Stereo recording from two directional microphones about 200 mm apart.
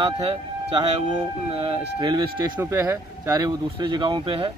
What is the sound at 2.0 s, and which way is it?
Speech, 20° right (ahead or behind).